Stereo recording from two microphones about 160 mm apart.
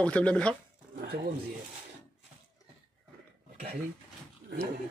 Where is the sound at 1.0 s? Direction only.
85° right.